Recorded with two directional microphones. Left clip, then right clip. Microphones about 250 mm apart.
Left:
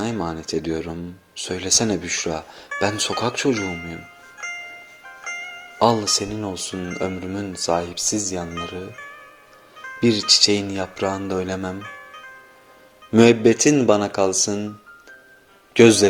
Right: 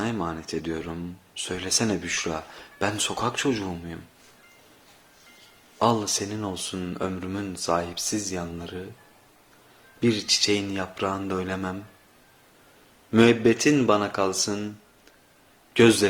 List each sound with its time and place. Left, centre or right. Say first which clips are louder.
0.0 s speech: left 3 dB; centre
5.8 s speech: left 5 dB; centre
10.0 s speech: left 7 dB; centre
13.1 s speech: left 5 dB; centre
15.7 s a man's voice: left 5 dB; centre